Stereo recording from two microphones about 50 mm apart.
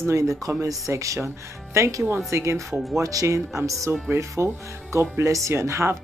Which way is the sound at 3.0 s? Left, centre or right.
Right.